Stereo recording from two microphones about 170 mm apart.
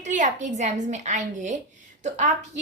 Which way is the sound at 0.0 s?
45° right (ahead or behind).